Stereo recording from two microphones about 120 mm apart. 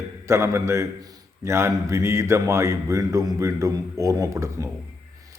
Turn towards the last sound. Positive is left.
turn(degrees=-25)  # may be behind; listen again after turning